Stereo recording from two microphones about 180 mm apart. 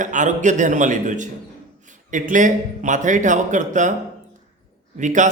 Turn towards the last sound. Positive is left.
turn(degrees=-45)  # may be behind; listen again after turning